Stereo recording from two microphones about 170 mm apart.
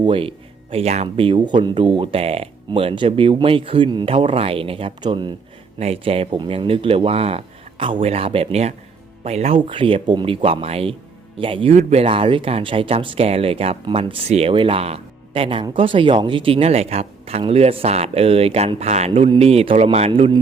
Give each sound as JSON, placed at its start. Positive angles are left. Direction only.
{"t": 0.0, "sound": "speech", "side_deg": -30}